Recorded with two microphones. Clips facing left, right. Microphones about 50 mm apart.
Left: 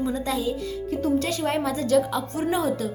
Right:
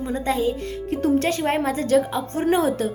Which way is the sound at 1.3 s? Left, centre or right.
Right.